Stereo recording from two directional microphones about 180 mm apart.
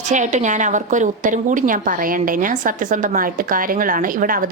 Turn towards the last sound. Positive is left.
turn(degrees=-50)  # may be behind; listen again after turning